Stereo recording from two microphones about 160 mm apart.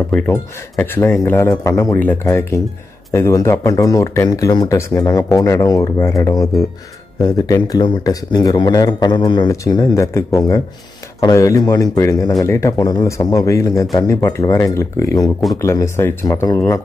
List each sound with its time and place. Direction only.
0.1 s speech: 10° left (ahead or behind)
3.1 s speech: 15° left (ahead or behind)